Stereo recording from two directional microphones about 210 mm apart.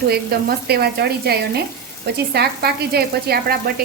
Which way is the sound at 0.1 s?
50° right (ahead or behind).